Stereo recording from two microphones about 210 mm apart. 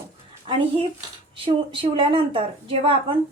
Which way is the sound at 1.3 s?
25° right (ahead or behind).